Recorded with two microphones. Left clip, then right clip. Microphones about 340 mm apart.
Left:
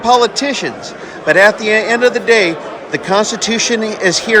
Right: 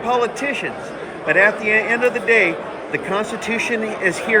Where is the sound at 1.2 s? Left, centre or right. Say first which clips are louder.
Left 6 dB; centre.